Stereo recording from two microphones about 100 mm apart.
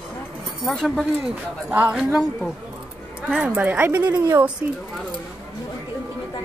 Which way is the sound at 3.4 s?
20° right (ahead or behind).